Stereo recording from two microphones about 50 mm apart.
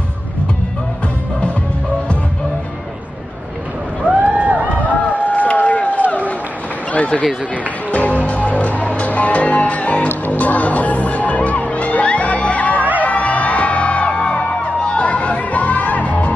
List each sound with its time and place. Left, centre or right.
4.2 s a sound: right
5.2 s run: left
6.9 s speech: left
7.9 s music: left